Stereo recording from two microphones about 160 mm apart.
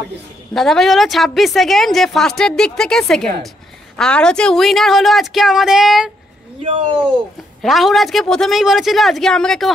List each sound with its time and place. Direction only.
0.6 s a woman's voice: centre (ahead or behind)
6.6 s speech: 30° right (ahead or behind)
7.6 s a woman's voice: centre (ahead or behind)